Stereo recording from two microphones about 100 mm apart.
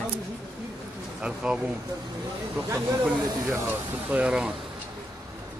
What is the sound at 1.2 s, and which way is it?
Speech, 10° right (ahead or behind).